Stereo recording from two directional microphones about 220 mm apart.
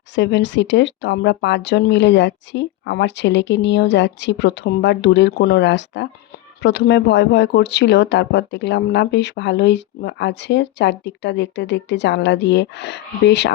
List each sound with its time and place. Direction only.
0.2 s speech: 50° left (ahead or behind)